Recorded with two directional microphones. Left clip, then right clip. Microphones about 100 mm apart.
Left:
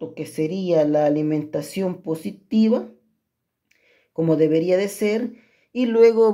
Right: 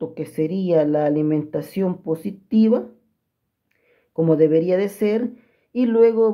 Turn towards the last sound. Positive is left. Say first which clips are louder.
# left 1 dB
turn(degrees=20)  # may be behind; listen again after turning